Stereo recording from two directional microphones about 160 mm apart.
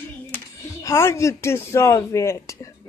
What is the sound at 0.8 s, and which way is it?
Speech, 15° left (ahead or behind).